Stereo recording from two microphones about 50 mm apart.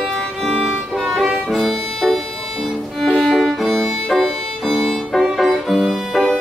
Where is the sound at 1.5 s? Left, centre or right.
Centre.